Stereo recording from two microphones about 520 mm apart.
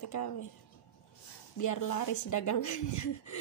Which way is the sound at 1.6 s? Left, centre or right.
Left.